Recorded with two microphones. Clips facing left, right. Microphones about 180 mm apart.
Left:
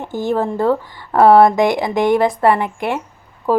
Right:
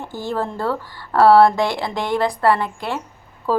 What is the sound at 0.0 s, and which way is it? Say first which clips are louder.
A woman's voice: left 6 dB; 20° left (ahead or behind).